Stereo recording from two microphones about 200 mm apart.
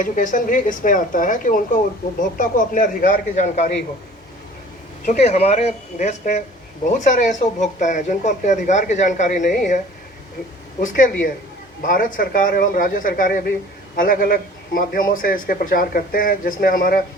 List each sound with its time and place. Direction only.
0.0 s a man's voice: 40° left (ahead or behind)
5.0 s a man's voice: 35° left (ahead or behind)